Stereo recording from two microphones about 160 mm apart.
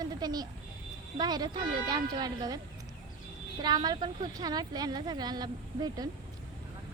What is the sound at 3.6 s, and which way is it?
A woman's voice, 25° right (ahead or behind).